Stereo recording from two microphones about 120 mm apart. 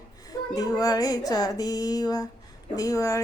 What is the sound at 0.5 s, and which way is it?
Music, 30° left (ahead or behind).